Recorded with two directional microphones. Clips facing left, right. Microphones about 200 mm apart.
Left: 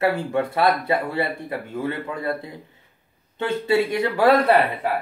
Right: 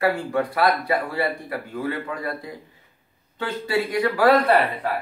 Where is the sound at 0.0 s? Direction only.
25° left (ahead or behind).